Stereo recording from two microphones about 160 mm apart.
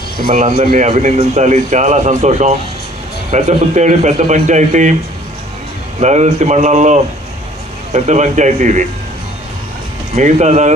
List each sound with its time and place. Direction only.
0.6 s speech: 60° right (ahead or behind)
0.9 s speech: 40° right (ahead or behind)
6.0 s speech: 45° right (ahead or behind)
10.2 s speech: 45° right (ahead or behind)